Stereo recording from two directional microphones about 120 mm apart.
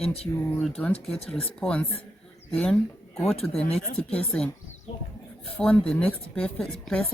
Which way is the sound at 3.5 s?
55° left (ahead or behind).